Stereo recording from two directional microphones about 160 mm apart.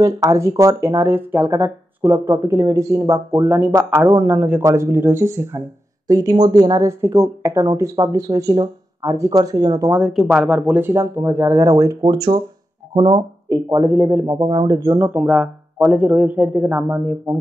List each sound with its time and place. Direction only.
0.0 s speech: 20° right (ahead or behind)
9.9 s speech: 5° right (ahead or behind); by 15.0 s 25° right (ahead or behind)
15.0 s speech: 10° right (ahead or behind)
15.2 s speech: centre (ahead or behind)